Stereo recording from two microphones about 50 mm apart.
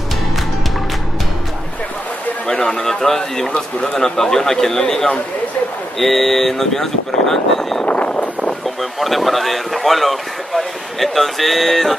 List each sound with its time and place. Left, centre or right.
2.4 s speech: centre
7.8 s vehicle: left
8.6 s speech: centre